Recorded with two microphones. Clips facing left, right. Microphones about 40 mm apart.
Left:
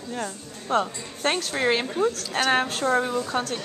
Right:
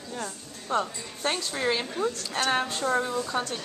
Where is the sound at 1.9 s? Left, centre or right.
Centre.